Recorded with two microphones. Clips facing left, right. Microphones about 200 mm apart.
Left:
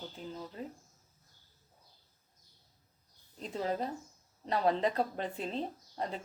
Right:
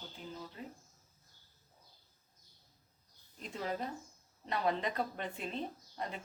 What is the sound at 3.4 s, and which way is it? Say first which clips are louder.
Speech: left 4 dB; 35° left (ahead or behind).